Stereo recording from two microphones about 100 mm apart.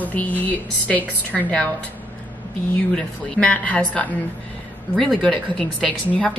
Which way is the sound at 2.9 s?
15° left (ahead or behind).